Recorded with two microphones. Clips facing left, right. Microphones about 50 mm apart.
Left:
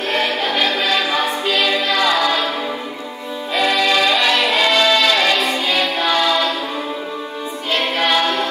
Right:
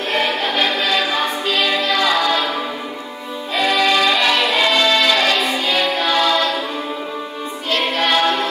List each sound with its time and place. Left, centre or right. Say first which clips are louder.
0.1 s music: even; centre
3.5 s music: even; centre
7.8 s a sound: right 1 dB; centre